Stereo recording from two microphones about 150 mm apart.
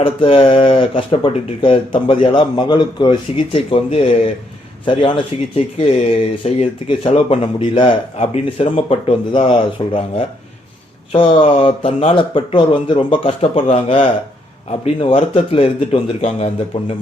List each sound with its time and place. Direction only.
0.0 s speech: 40° left (ahead or behind)